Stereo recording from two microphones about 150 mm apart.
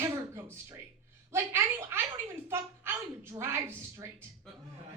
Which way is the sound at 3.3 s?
15° right (ahead or behind).